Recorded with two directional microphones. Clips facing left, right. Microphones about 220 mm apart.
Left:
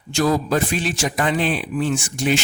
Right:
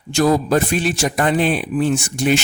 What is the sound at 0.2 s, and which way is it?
Speech, 45° right (ahead or behind).